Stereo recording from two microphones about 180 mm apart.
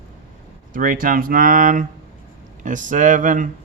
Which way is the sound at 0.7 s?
50° right (ahead or behind).